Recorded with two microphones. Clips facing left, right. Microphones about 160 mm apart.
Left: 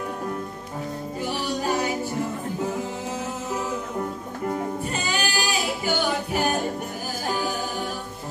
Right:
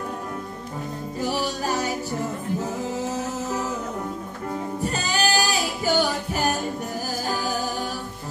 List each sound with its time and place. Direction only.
4.9 s singing: 40° right (ahead or behind)